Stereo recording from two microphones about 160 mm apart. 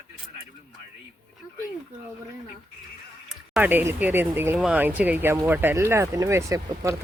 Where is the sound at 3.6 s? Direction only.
10° right (ahead or behind).